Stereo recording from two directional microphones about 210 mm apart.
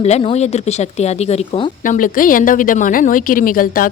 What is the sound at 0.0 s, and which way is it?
Speech, 30° left (ahead or behind).